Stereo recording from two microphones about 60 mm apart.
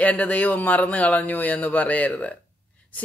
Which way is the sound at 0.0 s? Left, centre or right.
Left.